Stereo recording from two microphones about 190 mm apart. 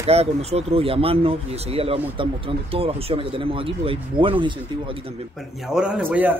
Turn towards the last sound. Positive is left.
turn(degrees=-10)  # may be behind; listen again after turning